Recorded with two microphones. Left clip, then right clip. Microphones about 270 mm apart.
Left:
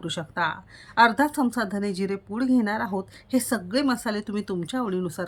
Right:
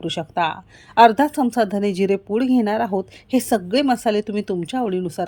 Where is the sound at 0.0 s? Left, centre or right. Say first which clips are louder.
Right 5 dB; centre.